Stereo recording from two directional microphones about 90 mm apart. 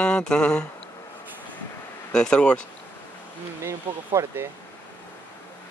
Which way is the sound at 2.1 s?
10° left (ahead or behind).